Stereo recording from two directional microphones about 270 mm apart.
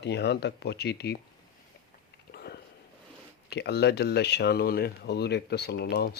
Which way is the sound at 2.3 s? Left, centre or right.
Left.